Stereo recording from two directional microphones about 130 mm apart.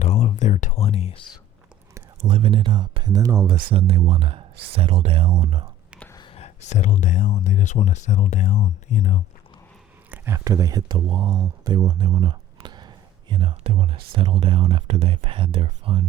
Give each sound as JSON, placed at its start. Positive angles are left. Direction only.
{"t": 0.0, "sound": "a sound", "side_deg": 55}
{"t": 2.2, "sound": "speech", "side_deg": -40}
{"t": 3.7, "sound": "speech", "side_deg": -45}
{"t": 6.3, "sound": "speech", "side_deg": 60}
{"t": 10.1, "sound": "speech", "side_deg": -20}